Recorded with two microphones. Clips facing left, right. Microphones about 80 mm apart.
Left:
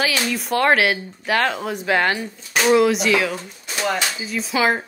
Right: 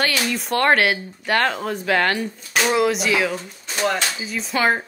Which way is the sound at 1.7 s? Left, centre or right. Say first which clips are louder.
Left 1 dB; centre.